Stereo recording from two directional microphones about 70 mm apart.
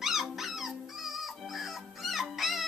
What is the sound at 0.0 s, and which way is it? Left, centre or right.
Dog, centre.